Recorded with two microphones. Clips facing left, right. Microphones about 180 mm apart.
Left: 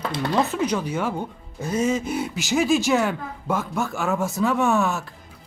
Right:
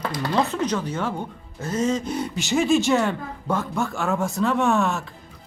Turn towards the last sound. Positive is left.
turn(degrees=0)  # may be behind; listen again after turning